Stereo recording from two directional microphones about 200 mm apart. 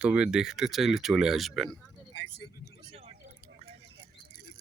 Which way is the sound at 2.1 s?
60° left (ahead or behind).